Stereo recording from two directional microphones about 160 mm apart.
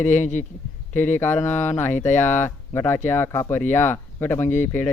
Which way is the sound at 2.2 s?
15° left (ahead or behind).